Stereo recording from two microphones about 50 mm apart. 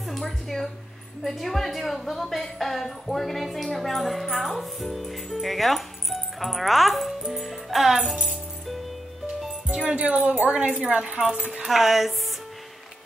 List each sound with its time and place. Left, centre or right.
0.0 s a woman's voice: centre
9.7 s speech: right
11.1 s speech: centre
11.6 s a woman's voice: centre